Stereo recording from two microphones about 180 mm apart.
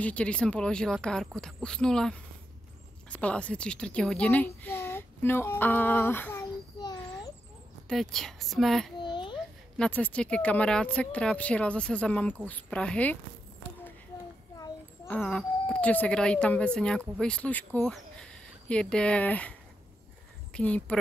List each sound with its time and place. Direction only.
0.0 s a woman's voice: 5° left (ahead or behind)
7.9 s speech: centre (ahead or behind)
9.0 s babbling: 25° left (ahead or behind)
9.8 s a woman's voice: 10° left (ahead or behind)
15.0 s speech: 5° left (ahead or behind)
20.5 s a woman's voice: 5° left (ahead or behind)